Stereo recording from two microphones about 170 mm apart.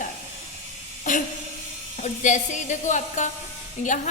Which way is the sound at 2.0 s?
45° left (ahead or behind).